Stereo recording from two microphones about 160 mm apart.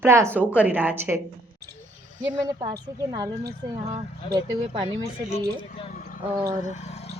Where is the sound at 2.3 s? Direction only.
30° right (ahead or behind).